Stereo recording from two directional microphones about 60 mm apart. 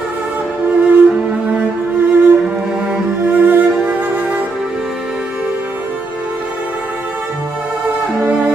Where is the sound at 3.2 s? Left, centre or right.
Right.